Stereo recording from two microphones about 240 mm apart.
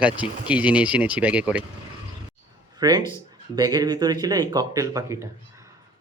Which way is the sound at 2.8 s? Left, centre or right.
Centre.